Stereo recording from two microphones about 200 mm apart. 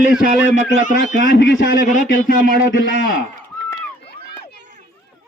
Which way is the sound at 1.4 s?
65° left (ahead or behind).